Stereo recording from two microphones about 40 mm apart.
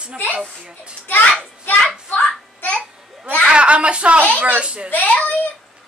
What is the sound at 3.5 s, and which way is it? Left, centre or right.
A woman's voice, right.